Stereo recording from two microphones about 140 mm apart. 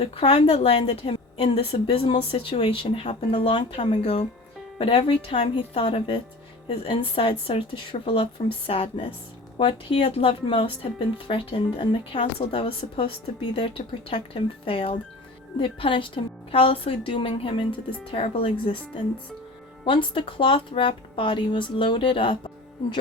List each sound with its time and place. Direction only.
0.0 s a woman's voice: 45° left (ahead or behind)
19.8 s a woman's voice: 35° left (ahead or behind)